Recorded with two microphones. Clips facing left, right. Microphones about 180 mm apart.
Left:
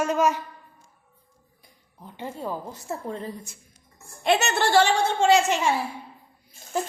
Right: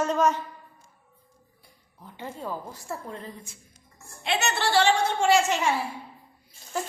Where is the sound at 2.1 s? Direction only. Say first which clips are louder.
Left 3 dB; 15° left (ahead or behind).